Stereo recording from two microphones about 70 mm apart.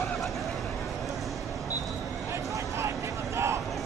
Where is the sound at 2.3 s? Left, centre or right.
Right.